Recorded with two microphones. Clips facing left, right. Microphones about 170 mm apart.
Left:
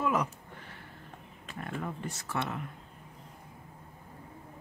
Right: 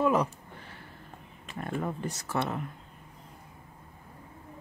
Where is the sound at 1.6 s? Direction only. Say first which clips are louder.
Right 4 dB; 35° right (ahead or behind).